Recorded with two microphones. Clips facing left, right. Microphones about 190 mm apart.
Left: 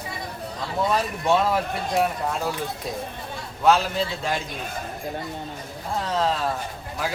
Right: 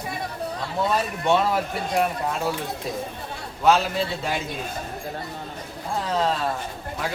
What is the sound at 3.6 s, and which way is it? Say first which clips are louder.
Speech: even; centre (ahead or behind).